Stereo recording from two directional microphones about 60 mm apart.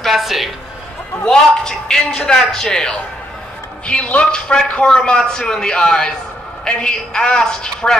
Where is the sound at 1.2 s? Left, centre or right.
Centre.